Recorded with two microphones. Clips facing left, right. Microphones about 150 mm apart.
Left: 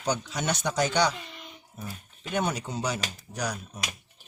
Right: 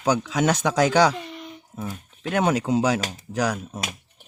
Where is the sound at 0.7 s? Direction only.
90° right.